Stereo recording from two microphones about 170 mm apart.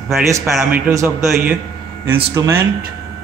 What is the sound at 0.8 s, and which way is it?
A man's voice, 15° right (ahead or behind).